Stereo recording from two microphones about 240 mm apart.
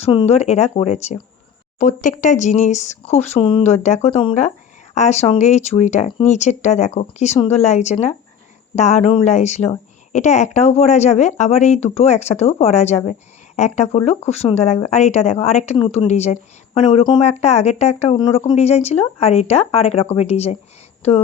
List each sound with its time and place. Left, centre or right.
0.0 s speech: left